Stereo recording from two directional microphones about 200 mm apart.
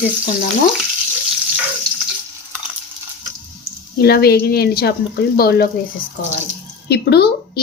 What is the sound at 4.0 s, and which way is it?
Speech, 50° left (ahead or behind).